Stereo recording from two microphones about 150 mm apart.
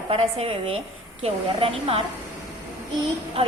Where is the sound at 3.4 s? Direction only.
40° right (ahead or behind).